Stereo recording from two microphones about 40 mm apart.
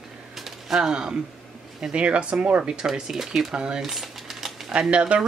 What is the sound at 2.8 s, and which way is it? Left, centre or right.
Speech, centre.